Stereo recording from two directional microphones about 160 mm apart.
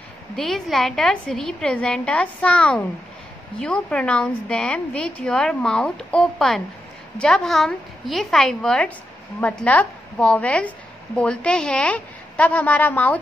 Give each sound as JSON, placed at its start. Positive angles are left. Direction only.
{"t": 0.4, "sound": "a woman's voice", "side_deg": 0}